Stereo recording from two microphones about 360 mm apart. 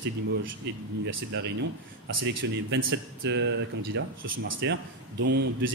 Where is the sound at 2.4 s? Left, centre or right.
Right.